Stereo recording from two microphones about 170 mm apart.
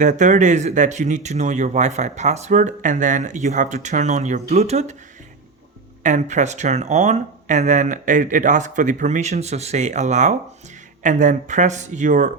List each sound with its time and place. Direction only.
0.0 s speech: 45° right (ahead or behind)
6.0 s speech: 45° right (ahead or behind)